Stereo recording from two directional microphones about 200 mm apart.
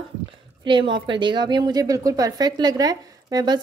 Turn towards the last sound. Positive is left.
turn(degrees=-20)  # may be behind; listen again after turning